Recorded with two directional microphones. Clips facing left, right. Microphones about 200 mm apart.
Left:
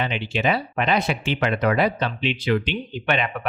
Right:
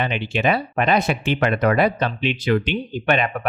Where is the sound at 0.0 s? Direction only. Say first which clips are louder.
Right 2 dB; 55° right (ahead or behind).